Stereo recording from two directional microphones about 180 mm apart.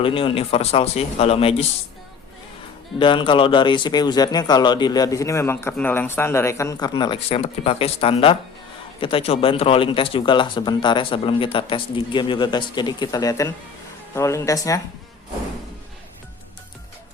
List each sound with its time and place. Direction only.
0.0 s speech: 30° left (ahead or behind)
3.0 s speech: 25° left (ahead or behind)